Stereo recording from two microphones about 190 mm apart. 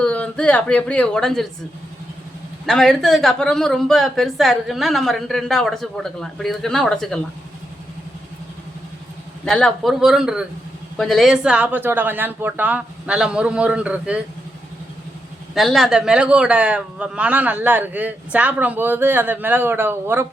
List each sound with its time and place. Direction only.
0.0 s speech: 5° left (ahead or behind)
2.6 s a woman's voice: centre (ahead or behind)
9.4 s a woman's voice: 5° left (ahead or behind)
15.5 s a man's voice: centre (ahead or behind)